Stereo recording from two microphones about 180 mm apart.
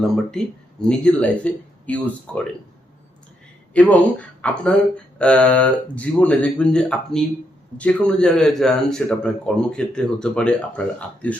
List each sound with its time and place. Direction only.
0.0 s speech: 5° left (ahead or behind)
3.8 s speech: 10° left (ahead or behind)